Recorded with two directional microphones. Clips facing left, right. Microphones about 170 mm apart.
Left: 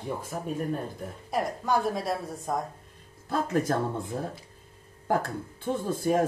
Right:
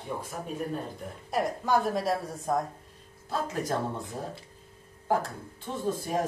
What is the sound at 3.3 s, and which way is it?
Speech, 50° left (ahead or behind).